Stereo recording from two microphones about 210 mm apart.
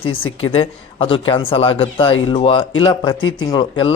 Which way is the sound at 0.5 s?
25° left (ahead or behind).